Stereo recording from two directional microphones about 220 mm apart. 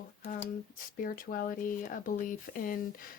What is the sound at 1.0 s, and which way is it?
Speech, 40° left (ahead or behind).